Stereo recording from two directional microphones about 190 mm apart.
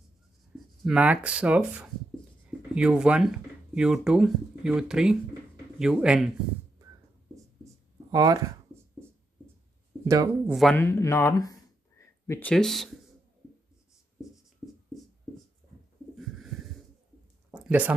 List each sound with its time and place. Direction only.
0.5 s writing: centre (ahead or behind)
0.8 s speech: 5° right (ahead or behind)
8.1 s speech: 20° right (ahead or behind)
10.0 s speech: 15° right (ahead or behind)
10.5 s speech: centre (ahead or behind)
10.8 s speech: 15° left (ahead or behind)
16.2 s wheeze: centre (ahead or behind)
17.6 s speech: 10° right (ahead or behind)